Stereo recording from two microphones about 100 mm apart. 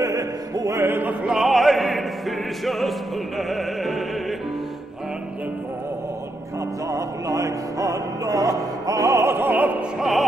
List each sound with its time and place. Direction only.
0.0 s opera: 35° right (ahead or behind)
1.2 s opera: 5° right (ahead or behind)
6.9 s music: 35° right (ahead or behind); by 9.8 s 15° right (ahead or behind)
9.9 s opera: centre (ahead or behind)